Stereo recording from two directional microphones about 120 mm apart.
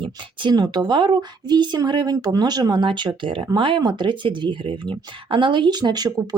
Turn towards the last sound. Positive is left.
turn(degrees=-30)  # may be behind; listen again after turning